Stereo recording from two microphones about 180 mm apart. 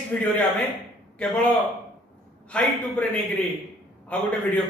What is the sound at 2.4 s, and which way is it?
Speech, 5° left (ahead or behind).